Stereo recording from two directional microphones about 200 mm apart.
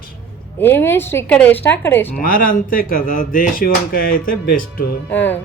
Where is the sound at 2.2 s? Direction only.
45° left (ahead or behind).